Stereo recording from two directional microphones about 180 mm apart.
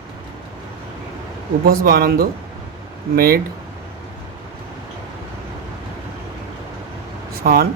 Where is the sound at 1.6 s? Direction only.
55° right (ahead or behind).